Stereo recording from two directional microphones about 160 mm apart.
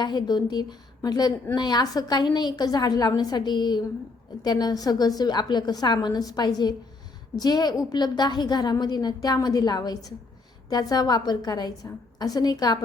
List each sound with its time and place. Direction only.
0.0 s a woman's voice: 25° left (ahead or behind)